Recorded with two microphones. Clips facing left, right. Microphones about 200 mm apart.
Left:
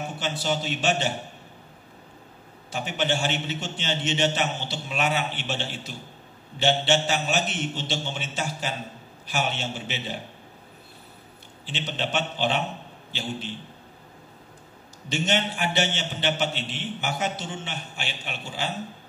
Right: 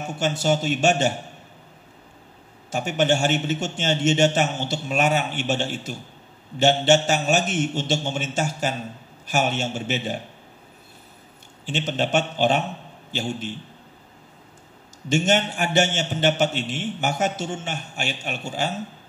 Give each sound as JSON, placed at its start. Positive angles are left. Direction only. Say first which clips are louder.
{"t": 0.2, "sound": "a man's voice", "louder": "right 7 dB", "side_deg": -45}
{"t": 2.7, "sound": "a man's voice", "louder": "right 6 dB", "side_deg": -45}
{"t": 11.6, "sound": "a man's voice", "louder": "right 6 dB", "side_deg": -45}
{"t": 15.0, "sound": "a man's voice", "louder": "right 5 dB", "side_deg": -45}